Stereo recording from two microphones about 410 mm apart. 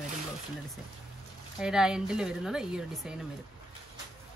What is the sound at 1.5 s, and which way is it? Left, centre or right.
Speech, centre.